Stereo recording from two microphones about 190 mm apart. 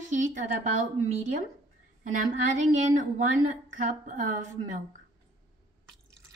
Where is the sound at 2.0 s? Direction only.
40° right (ahead or behind).